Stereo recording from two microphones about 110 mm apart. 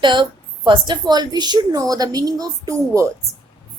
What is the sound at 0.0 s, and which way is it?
A woman's voice, 45° right (ahead or behind).